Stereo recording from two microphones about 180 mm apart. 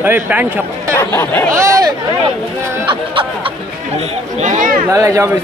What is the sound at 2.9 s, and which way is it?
Music, 30° right (ahead or behind).